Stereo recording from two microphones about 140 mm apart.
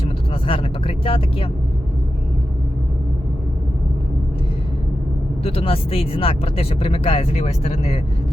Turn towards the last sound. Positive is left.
turn(degrees=45)  # may be behind; listen again after turning